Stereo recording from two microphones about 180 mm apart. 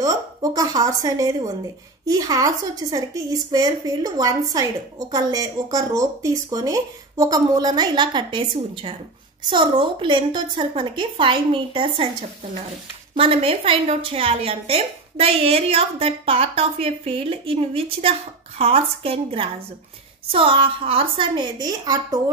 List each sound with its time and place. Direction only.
0.0 s a woman's voice: 20° right (ahead or behind)
13.1 s a woman's voice: 30° right (ahead or behind)